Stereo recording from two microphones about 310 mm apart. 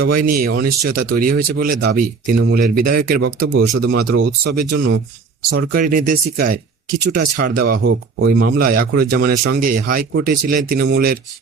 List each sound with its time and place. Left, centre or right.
0.0 s speech: right